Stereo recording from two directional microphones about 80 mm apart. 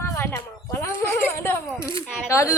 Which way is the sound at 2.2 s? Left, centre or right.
Left.